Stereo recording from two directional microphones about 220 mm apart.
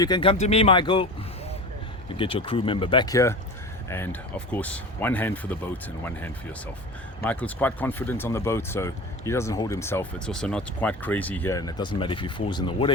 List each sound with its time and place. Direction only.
0.0 s speech: 20° left (ahead or behind)
2.1 s speech: 25° left (ahead or behind)